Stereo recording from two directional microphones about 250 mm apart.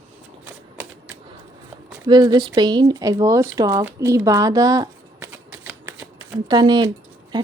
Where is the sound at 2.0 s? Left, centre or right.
Centre.